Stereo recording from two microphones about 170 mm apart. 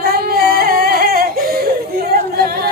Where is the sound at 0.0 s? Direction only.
65° right (ahead or behind).